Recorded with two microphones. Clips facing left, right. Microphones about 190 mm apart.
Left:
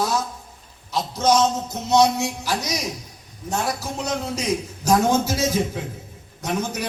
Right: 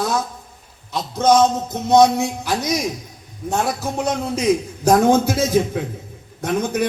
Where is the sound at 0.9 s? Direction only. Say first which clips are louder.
Right 4 dB; 55° right (ahead or behind).